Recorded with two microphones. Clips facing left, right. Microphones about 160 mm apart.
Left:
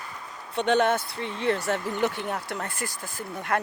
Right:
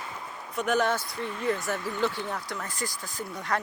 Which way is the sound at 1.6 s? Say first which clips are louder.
Left 3 dB; 25° left (ahead or behind).